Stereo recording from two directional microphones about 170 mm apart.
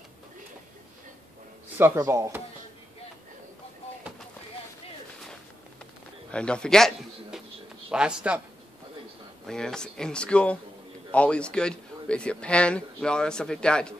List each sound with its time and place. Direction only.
1.8 s speech: 15° right (ahead or behind)
6.3 s speech: 5° left (ahead or behind)
9.5 s speech: 5° left (ahead or behind)